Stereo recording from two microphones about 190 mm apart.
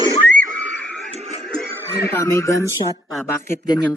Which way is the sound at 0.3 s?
45° right (ahead or behind).